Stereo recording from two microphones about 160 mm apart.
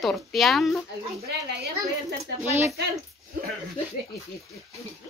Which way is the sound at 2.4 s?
15° right (ahead or behind).